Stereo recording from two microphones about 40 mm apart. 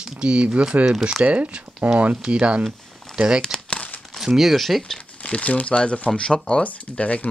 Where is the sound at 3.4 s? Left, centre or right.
Centre.